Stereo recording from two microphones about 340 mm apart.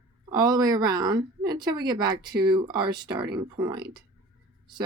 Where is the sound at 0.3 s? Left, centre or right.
Centre.